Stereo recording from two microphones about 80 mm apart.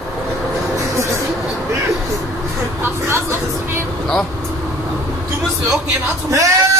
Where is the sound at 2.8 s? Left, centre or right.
Right.